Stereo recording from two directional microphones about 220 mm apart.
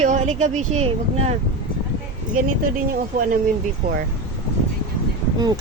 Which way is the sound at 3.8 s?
40° right (ahead or behind).